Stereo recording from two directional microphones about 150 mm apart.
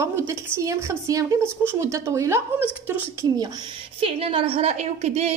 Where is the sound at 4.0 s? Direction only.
40° right (ahead or behind).